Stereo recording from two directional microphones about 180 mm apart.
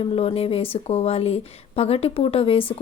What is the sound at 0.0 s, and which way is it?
Speech, 30° left (ahead or behind).